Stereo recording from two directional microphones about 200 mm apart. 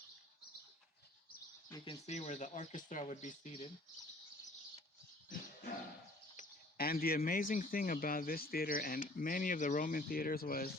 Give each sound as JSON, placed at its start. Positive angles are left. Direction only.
{"t": 1.7, "sound": "speech", "side_deg": 25}
{"t": 6.3, "sound": "speech", "side_deg": 45}